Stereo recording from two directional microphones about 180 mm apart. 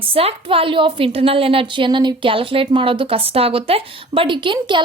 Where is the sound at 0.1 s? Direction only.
30° right (ahead or behind).